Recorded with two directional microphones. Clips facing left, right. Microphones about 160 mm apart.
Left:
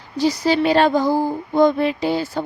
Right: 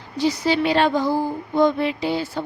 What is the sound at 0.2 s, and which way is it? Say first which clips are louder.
A woman's voice: left 2 dB; 40° left (ahead or behind).